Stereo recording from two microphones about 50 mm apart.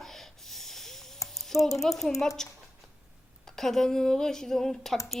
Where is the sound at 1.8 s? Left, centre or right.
Centre.